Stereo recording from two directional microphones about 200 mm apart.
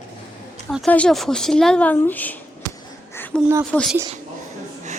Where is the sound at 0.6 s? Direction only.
5° left (ahead or behind).